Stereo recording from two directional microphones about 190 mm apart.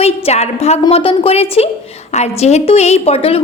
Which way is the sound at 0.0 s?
35° left (ahead or behind).